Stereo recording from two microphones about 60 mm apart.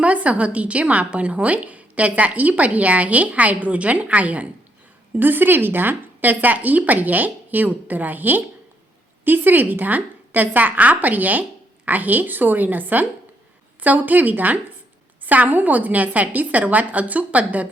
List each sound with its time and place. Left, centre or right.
0.0 s a woman's voice: right